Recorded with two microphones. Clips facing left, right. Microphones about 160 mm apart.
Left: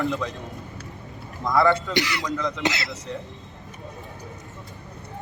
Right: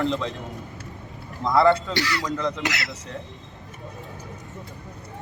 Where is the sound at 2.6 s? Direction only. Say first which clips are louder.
Left 3 dB; 25° left (ahead or behind).